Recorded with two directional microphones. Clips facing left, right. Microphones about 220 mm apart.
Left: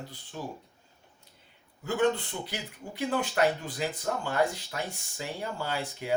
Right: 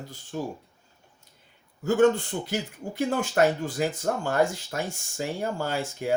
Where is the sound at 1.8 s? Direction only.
45° right (ahead or behind).